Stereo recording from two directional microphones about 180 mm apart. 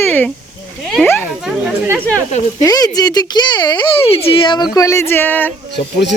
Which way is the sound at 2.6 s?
20° left (ahead or behind).